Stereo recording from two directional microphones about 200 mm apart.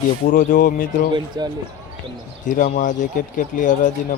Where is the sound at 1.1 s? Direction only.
20° right (ahead or behind).